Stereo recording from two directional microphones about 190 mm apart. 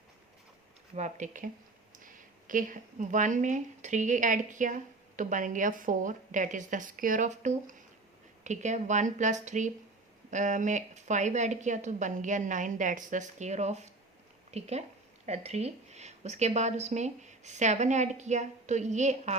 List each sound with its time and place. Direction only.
0.9 s speech: 40° right (ahead or behind)